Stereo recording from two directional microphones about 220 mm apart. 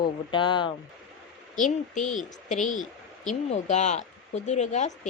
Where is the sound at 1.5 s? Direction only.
35° left (ahead or behind).